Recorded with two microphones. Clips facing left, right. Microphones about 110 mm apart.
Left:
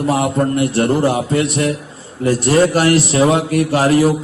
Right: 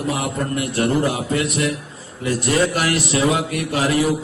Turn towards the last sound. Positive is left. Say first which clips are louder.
# left 6 dB
turn(degrees=35)  # may be behind; listen again after turning